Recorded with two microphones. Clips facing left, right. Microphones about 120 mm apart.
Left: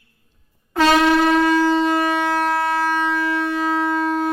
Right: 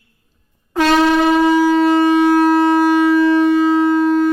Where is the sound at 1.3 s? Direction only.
10° right (ahead or behind).